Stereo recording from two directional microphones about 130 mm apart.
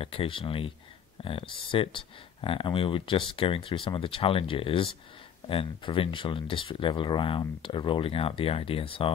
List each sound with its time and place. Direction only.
0.0 s speech: 45° left (ahead or behind)